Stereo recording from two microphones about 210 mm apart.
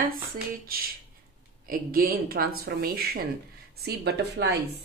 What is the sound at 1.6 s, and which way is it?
A woman's voice, 45° right (ahead or behind).